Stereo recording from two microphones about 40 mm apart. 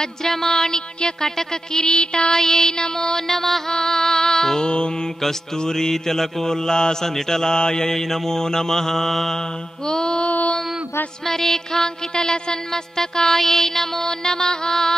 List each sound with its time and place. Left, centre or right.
0.0 s mantra: centre
3.7 s music: centre
4.6 s mantra: left
11.2 s mantra: centre